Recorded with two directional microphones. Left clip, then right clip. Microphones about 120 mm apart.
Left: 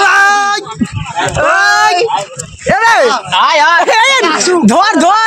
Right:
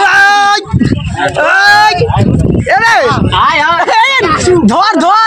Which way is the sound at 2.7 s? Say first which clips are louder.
Even; 25° left (ahead or behind).